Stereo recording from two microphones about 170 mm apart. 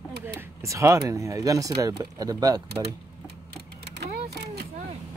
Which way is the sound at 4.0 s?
75° right (ahead or behind).